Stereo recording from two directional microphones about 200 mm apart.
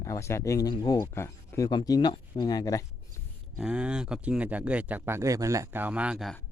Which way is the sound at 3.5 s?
5° right (ahead or behind).